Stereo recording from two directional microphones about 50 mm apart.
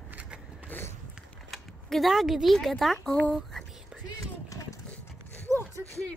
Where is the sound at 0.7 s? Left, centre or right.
Left.